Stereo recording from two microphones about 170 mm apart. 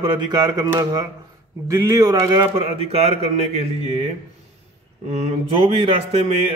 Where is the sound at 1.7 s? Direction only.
20° right (ahead or behind).